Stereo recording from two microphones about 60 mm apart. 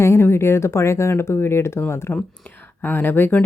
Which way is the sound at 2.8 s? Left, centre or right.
Left.